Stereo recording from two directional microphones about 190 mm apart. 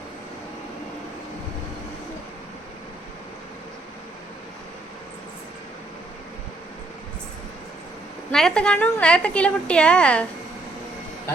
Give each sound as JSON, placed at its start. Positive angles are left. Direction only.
{"t": 8.3, "sound": "a woman's voice", "side_deg": 5}